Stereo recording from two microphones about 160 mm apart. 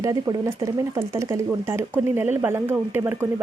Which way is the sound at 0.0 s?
20° right (ahead or behind).